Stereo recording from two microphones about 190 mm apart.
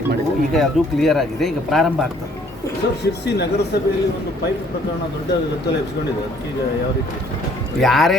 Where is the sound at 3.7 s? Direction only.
60° left (ahead or behind).